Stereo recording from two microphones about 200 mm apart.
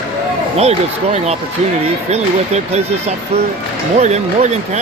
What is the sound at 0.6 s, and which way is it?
Speech, 30° right (ahead or behind).